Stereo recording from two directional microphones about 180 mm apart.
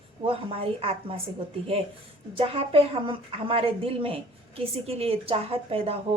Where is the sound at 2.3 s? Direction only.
30° right (ahead or behind).